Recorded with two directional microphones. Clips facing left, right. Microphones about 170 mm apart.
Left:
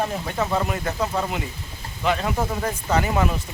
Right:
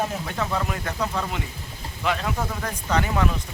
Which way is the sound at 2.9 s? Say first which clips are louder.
Left 1 dB; 10° left (ahead or behind).